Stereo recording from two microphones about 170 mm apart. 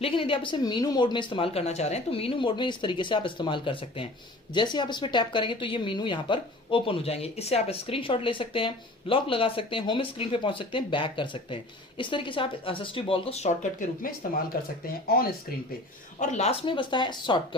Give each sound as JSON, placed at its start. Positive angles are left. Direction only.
{"t": 0.0, "sound": "speech", "side_deg": 30}
{"t": 15.0, "sound": "speech", "side_deg": 65}
{"t": 16.2, "sound": "speech", "side_deg": 40}